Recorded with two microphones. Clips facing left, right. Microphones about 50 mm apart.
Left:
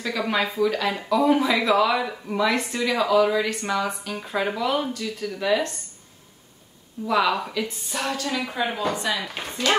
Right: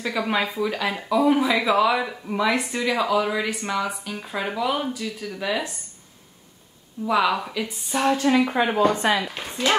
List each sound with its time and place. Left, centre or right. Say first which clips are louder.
0.0 s speech: even; centre
7.1 s speech: right 1 dB; centre
7.6 s a woman's voice: right 5 dB; centre; by 9.2 s right
9.3 s speech: left 1 dB; centre